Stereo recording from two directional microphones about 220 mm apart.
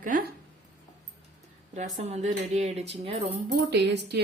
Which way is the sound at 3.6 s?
50° right (ahead or behind).